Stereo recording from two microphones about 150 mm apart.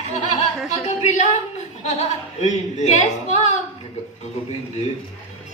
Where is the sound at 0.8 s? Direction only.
50° left (ahead or behind).